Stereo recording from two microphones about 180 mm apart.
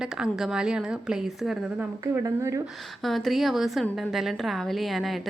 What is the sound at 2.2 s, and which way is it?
Speech, 15° right (ahead or behind).